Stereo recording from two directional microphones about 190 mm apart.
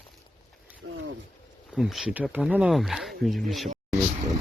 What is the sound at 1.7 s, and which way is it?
Speech, centre (ahead or behind).